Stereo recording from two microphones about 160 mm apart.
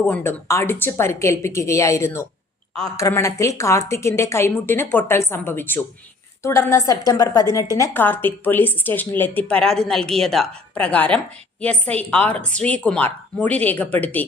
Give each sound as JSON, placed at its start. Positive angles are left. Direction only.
{"t": 0.1, "sound": "a woman's voice", "side_deg": 10}